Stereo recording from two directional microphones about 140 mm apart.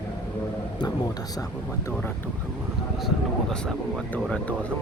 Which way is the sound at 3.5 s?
5° left (ahead or behind).